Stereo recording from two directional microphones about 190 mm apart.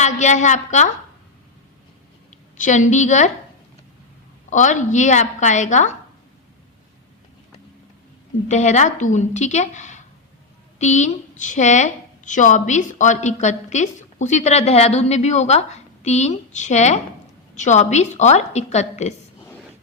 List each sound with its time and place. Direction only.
0.0 s a woman's voice: 40° left (ahead or behind)
2.6 s a woman's voice: 40° left (ahead or behind)
4.4 s a woman's voice: 40° left (ahead or behind)
8.4 s a woman's voice: 40° left (ahead or behind)